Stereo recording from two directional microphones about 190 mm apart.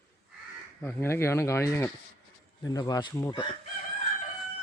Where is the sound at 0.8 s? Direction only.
10° left (ahead or behind).